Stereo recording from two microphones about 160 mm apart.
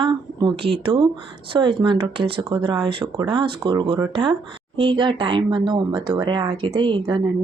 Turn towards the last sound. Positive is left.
turn(degrees=-30)  # may be behind; listen again after turning